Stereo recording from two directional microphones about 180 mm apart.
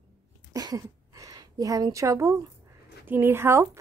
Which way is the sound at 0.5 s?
20° right (ahead or behind).